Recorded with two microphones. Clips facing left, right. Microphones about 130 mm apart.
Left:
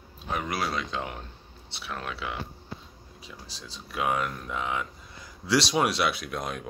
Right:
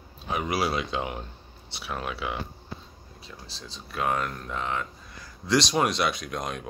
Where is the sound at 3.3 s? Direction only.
10° left (ahead or behind).